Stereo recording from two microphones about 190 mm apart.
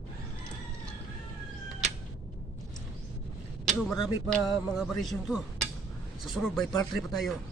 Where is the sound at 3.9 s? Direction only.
20° left (ahead or behind).